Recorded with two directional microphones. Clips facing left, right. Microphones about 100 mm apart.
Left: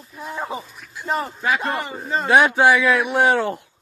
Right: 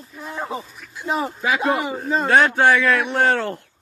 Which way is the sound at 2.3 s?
15° left (ahead or behind).